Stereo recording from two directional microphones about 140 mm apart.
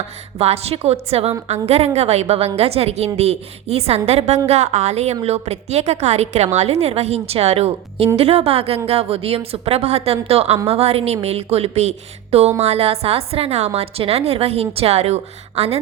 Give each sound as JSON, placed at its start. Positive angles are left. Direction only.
{"t": 0.3, "sound": "a woman's voice", "side_deg": -45}